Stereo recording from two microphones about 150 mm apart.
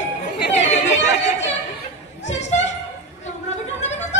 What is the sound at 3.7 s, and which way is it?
Music, 50° left (ahead or behind).